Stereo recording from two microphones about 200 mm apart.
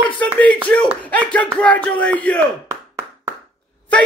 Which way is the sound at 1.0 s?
10° left (ahead or behind).